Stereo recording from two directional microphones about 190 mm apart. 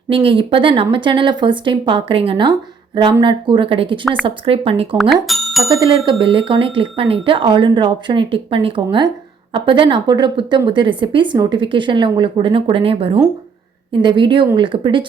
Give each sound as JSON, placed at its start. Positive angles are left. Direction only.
{"t": 0.1, "sound": "speech", "side_deg": -30}
{"t": 4.9, "sound": "speech", "side_deg": 0}
{"t": 5.8, "sound": "speech", "side_deg": -25}